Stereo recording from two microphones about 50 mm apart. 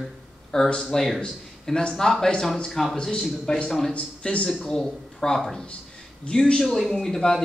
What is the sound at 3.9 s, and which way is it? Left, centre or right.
Speech, left.